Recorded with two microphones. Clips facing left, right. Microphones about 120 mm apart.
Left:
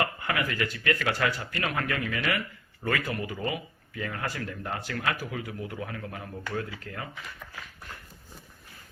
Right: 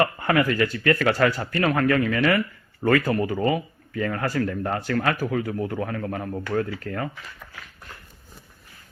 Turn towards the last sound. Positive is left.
turn(degrees=-55)  # may be behind; listen again after turning